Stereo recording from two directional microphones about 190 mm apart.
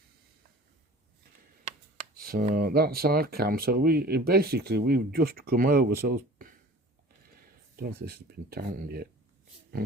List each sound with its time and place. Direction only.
2.2 s speech: 50° right (ahead or behind)
7.8 s speech: 50° right (ahead or behind)